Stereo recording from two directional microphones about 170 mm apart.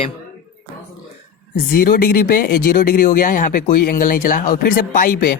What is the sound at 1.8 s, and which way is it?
Speech, 60° left (ahead or behind).